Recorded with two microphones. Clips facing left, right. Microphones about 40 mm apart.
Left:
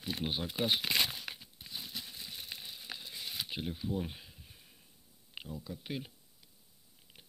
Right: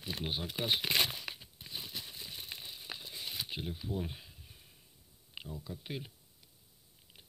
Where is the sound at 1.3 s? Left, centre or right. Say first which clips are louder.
Even; centre.